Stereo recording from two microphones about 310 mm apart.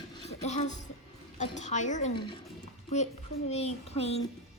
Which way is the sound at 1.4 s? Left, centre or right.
Left.